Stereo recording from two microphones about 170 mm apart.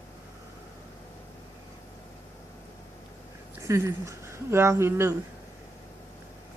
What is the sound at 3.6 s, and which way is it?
Speech, 15° right (ahead or behind).